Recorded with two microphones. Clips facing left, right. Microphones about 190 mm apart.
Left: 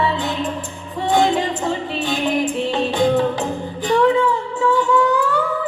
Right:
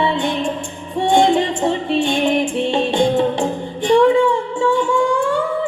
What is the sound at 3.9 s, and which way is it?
Child singing, 25° right (ahead or behind).